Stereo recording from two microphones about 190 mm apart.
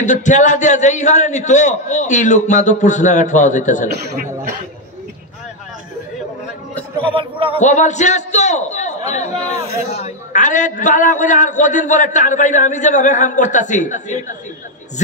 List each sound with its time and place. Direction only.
0.0 s a man's voice: 40° left (ahead or behind)
7.0 s speech: 25° right (ahead or behind)
7.5 s a man's voice: 40° left (ahead or behind)